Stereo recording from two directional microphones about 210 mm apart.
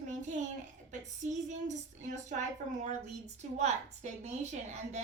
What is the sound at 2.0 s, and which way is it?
A woman's voice, 35° right (ahead or behind).